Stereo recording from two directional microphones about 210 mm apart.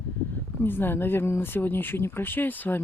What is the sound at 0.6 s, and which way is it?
Speech, 10° left (ahead or behind).